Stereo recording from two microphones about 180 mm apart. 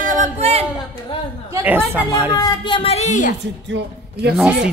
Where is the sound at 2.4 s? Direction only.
25° left (ahead or behind); by 3.3 s 40° left (ahead or behind).